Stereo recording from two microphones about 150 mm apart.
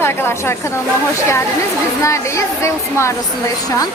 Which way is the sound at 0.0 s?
15° left (ahead or behind).